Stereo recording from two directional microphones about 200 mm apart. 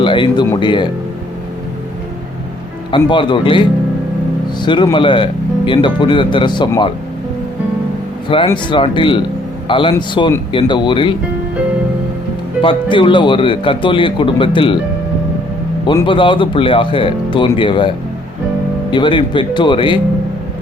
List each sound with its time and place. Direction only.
0.0 s music: 25° left (ahead or behind)
0.6 s speech: 25° left (ahead or behind)
2.9 s speech: 25° left (ahead or behind)
8.4 s speech: 25° left (ahead or behind)
12.6 s speech: 25° left (ahead or behind)
15.9 s speech: 25° left (ahead or behind)